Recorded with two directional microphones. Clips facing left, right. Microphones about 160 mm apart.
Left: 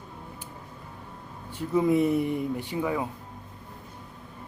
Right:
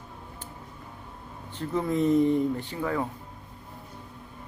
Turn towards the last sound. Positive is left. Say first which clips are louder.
# left 1 dB
turn(degrees=10)  # may be behind; listen again after turning